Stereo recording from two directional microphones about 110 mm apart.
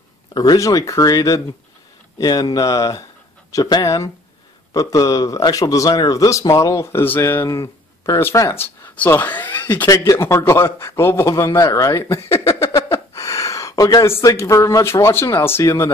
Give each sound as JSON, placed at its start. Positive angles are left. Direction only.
{"t": 0.3, "sound": "a man's voice", "side_deg": 35}